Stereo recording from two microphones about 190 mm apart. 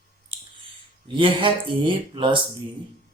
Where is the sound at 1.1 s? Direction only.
25° right (ahead or behind).